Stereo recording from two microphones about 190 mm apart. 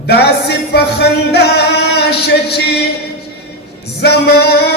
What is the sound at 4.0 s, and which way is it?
Music, 60° left (ahead or behind).